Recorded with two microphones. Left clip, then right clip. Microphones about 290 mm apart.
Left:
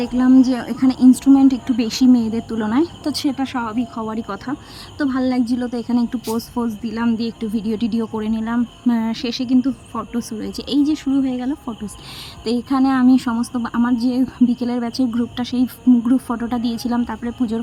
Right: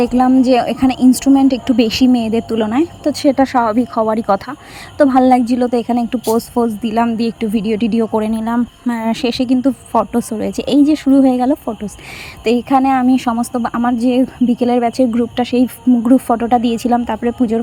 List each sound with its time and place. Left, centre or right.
0.0 s speech: centre
12.6 s speech: centre
16.6 s speech: right
16.9 s speech: centre